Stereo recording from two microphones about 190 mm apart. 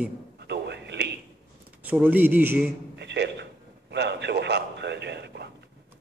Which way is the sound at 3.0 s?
65° right (ahead or behind).